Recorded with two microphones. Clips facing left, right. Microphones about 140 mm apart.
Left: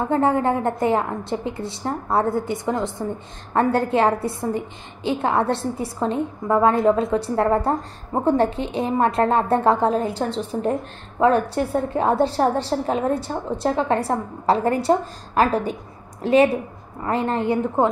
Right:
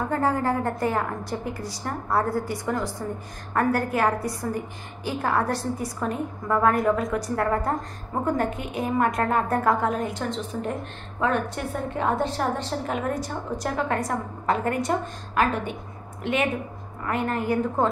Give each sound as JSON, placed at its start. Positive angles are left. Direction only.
{"t": 0.0, "sound": "a woman's voice", "side_deg": 25}